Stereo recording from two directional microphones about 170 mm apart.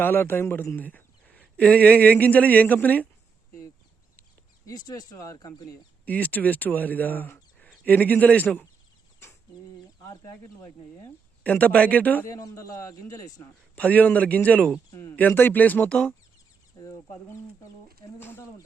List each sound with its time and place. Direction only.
0.0 s speech: 15° left (ahead or behind)
4.6 s speech: 25° left (ahead or behind)
6.1 s speech: 10° left (ahead or behind)
9.2 s bird: 15° left (ahead or behind)
10.0 s speech: 20° left (ahead or behind)
11.4 s speech: 10° left (ahead or behind)
13.7 s speech: 10° left (ahead or behind)
16.7 s chicken: 20° left (ahead or behind)
18.2 s speech: 15° left (ahead or behind)